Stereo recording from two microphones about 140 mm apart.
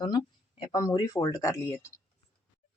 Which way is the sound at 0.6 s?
30° left (ahead or behind).